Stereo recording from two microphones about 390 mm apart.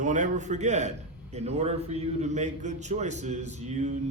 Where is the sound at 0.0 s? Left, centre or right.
Centre.